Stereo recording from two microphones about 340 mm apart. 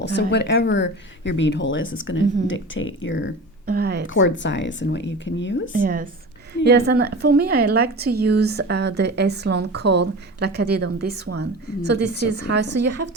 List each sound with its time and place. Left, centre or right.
0.0 s speech: left
3.7 s speech: right
4.0 s speech: left
5.7 s a woman's voice: right